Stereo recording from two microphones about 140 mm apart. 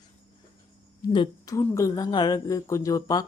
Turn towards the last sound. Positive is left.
turn(degrees=25)  # may be behind; listen again after turning